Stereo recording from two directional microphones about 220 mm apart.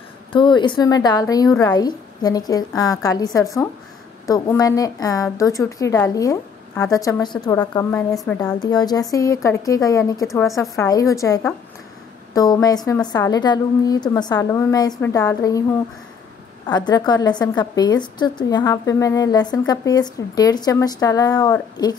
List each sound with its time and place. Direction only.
0.3 s a woman's voice: 20° left (ahead or behind)
16.6 s a woman's voice: 20° left (ahead or behind)